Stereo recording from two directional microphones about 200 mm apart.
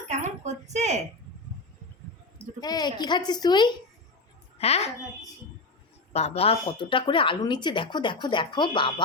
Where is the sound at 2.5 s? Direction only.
20° left (ahead or behind).